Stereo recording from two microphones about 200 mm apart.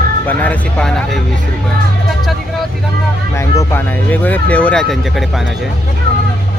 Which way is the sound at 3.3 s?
10° left (ahead or behind).